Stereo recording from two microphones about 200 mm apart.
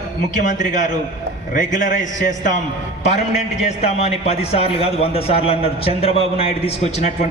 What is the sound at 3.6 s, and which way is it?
A man's voice, 35° left (ahead or behind).